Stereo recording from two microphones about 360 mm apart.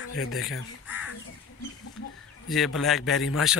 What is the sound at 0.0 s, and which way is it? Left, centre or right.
Chicken, left.